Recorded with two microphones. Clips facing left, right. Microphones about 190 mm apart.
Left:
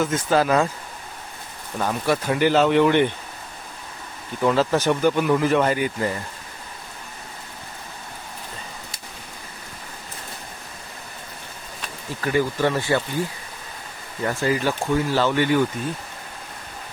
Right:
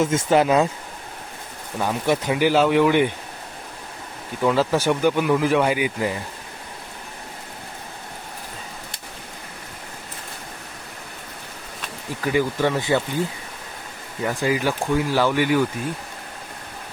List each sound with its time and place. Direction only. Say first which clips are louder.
0.0 s speech: right 2 dB; 25° right (ahead or behind)
1.8 s speech: right 1 dB; 15° right (ahead or behind)
4.4 s speech: even; 10° right (ahead or behind)
12.2 s speech: even; 15° right (ahead or behind)
14.3 s speech: even; 15° right (ahead or behind)